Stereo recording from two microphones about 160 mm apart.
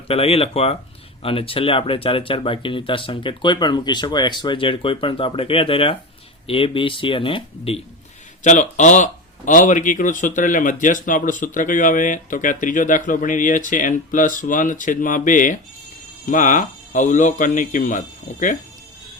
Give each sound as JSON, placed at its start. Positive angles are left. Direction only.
{"t": 0.1, "sound": "speech", "side_deg": 40}
{"t": 8.4, "sound": "speech", "side_deg": 50}